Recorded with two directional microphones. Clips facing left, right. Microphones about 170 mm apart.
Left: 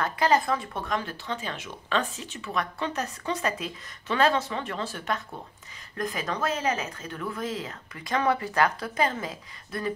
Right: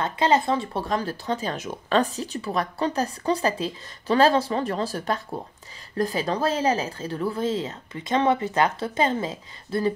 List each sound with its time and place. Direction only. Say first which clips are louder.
0.0 s speech: right 2 dB; 25° right (ahead or behind)